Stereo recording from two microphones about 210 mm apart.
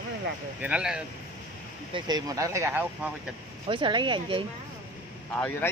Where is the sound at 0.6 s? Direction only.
5° right (ahead or behind).